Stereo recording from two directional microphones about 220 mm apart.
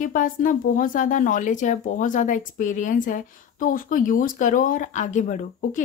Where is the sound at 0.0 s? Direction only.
35° left (ahead or behind).